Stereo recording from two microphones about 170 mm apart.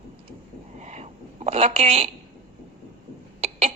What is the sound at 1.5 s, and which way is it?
Speech, 40° right (ahead or behind).